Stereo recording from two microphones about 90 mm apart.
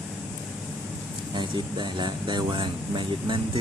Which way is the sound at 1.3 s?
60° right (ahead or behind).